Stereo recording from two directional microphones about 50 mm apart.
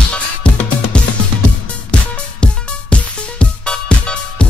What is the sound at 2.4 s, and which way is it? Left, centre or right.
Music, left.